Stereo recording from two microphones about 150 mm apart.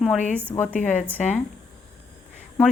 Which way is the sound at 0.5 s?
10° left (ahead or behind).